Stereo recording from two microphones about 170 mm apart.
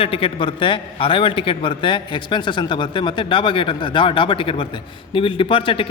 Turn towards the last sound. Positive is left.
turn(degrees=30)  # may be behind; listen again after turning